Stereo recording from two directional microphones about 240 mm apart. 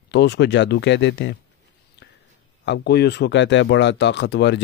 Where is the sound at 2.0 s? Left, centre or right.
Left.